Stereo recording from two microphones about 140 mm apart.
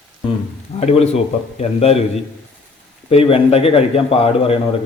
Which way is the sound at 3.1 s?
45° left (ahead or behind).